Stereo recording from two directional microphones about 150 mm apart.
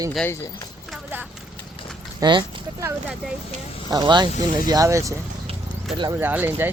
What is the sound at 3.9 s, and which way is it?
Speech, 30° right (ahead or behind).